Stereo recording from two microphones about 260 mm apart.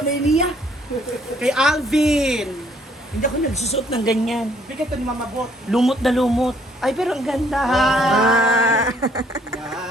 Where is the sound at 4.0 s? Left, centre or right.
Centre.